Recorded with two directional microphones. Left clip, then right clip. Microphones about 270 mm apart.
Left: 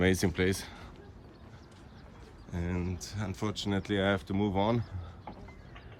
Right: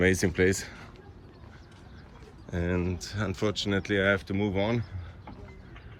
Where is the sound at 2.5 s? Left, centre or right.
Centre.